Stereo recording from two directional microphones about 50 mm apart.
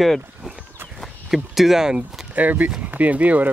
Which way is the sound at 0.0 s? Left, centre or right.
Centre.